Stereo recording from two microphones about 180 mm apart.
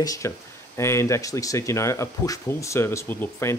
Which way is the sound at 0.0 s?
20° left (ahead or behind).